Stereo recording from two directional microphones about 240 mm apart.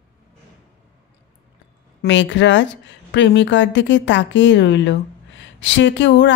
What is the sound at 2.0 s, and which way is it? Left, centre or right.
A woman's voice, left.